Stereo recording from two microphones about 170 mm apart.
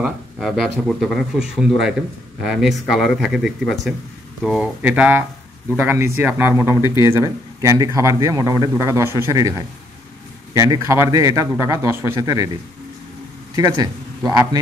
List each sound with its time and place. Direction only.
0.0 s a man's voice: centre (ahead or behind); by 12.4 s 20° right (ahead or behind)
13.6 s a man's voice: 20° right (ahead or behind)